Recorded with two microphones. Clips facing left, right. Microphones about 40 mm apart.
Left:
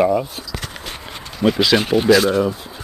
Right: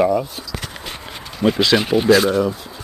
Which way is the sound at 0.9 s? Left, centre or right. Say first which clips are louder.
Even; centre.